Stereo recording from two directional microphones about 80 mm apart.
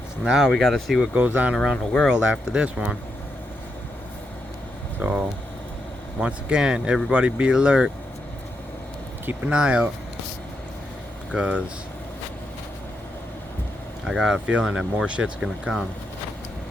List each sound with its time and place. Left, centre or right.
0.3 s speech: centre
1.0 s speech: centre
1.5 s speech: centre
2.0 s speech: centre
4.9 s speech: centre
9.5 s speech: centre
11.3 s speech: centre
14.0 s speech: centre